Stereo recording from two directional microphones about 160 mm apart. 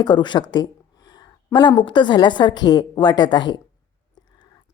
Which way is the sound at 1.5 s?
30° left (ahead or behind).